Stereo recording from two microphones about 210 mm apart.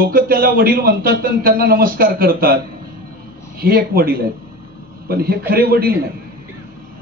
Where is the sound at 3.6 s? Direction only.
45° right (ahead or behind).